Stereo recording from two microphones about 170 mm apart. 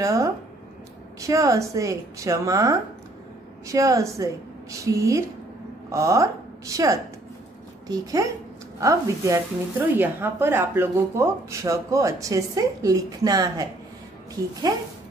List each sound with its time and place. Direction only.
0.0 s speech: 20° right (ahead or behind)